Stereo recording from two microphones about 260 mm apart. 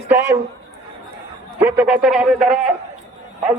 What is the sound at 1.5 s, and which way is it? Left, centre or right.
A man's voice, centre.